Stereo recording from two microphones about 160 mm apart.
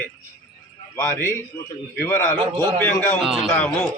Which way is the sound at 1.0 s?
15° left (ahead or behind).